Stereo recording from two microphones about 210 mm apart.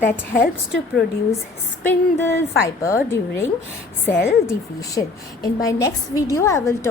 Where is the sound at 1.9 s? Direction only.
10° left (ahead or behind).